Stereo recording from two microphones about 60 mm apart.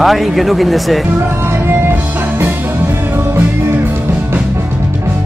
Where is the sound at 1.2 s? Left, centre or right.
Right.